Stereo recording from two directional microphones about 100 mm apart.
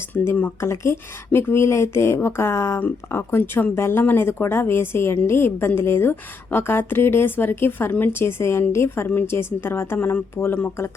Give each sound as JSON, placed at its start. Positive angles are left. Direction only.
{"t": 0.1, "sound": "speech", "side_deg": 15}